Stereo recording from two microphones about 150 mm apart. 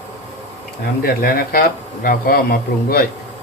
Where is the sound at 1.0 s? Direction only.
85° left.